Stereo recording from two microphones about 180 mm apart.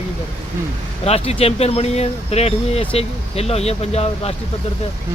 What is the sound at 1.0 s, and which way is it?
Speech, 35° left (ahead or behind).